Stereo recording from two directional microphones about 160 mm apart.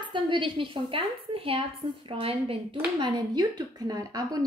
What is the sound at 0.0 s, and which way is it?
A woman's voice, 30° right (ahead or behind).